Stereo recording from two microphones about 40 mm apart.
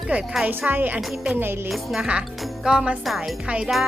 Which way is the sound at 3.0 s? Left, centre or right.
Centre.